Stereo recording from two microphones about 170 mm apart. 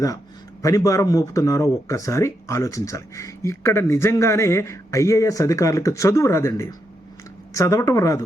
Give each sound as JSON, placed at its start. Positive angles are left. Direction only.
{"t": 0.6, "sound": "a man's voice", "side_deg": 20}